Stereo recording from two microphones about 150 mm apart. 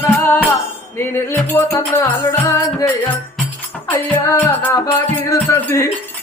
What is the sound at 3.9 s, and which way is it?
Music, 20° left (ahead or behind).